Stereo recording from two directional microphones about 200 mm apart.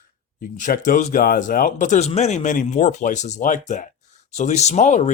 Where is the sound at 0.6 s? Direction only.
40° left (ahead or behind).